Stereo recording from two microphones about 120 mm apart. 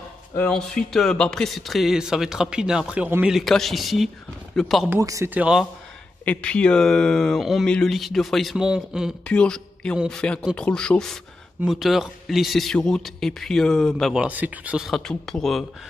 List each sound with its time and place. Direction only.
0.4 s a man's voice: 5° left (ahead or behind)
4.8 s speech: 25° right (ahead or behind)
5.3 s speech: 10° right (ahead or behind)
6.2 s a man's voice: 10° left (ahead or behind); by 9.1 s 5° right (ahead or behind)
9.2 s a man's voice: 10° left (ahead or behind)
14.2 s speech: 15° right (ahead or behind)
14.9 s a man's voice: 5° left (ahead or behind)